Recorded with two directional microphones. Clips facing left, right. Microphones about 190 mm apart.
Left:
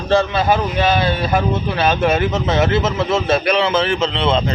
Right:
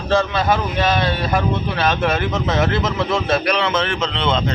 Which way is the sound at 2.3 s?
30° left (ahead or behind).